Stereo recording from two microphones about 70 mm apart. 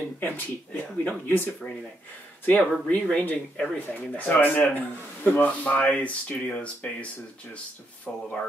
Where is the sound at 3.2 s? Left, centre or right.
Left.